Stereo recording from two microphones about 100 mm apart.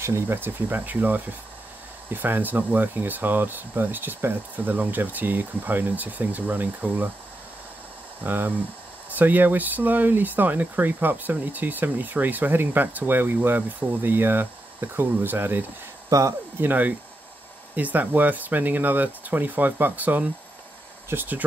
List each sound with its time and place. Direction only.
0.0 s speech: 25° right (ahead or behind)
8.2 s speech: 20° right (ahead or behind)
16.1 s speech: 30° right (ahead or behind)
16.6 s speech: 15° right (ahead or behind)